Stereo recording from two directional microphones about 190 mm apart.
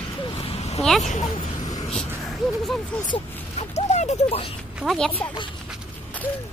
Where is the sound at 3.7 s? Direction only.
35° left (ahead or behind).